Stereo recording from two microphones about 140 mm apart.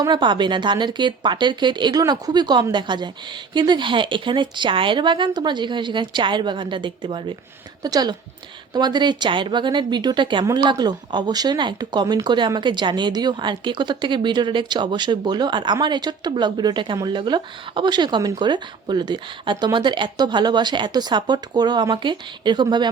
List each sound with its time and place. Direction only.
0.0 s a woman's voice: 35° right (ahead or behind)